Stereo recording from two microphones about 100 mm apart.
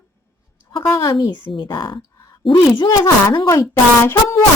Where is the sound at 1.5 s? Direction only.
50° left (ahead or behind).